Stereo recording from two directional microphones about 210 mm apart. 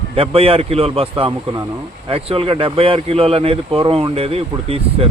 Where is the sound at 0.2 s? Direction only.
25° right (ahead or behind).